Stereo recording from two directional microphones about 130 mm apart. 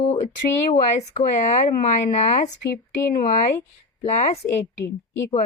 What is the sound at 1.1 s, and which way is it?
Speech, 65° left (ahead or behind).